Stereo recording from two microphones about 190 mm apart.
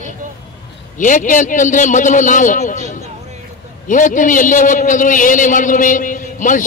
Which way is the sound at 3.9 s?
45° left (ahead or behind).